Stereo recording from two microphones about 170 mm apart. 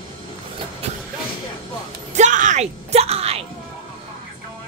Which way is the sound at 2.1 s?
45° right (ahead or behind).